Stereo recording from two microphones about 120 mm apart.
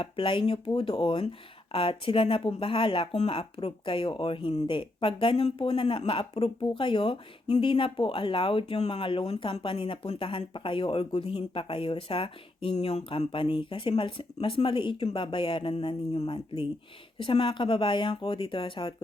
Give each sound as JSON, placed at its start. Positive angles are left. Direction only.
{"t": 0.0, "sound": "speech", "side_deg": 45}